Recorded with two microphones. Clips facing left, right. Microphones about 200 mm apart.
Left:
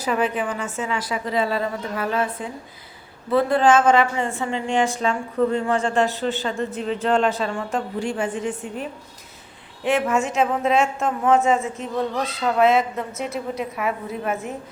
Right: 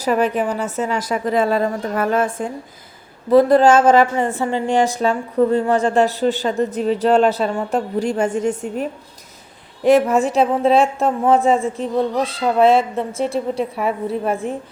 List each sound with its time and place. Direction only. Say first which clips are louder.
0.0 s a woman's voice: right 5 dB; 40° right (ahead or behind)